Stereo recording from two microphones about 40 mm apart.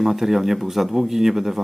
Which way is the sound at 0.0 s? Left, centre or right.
Centre.